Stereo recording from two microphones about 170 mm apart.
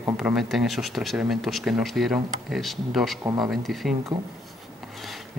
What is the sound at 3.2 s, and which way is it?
Speech, 25° right (ahead or behind).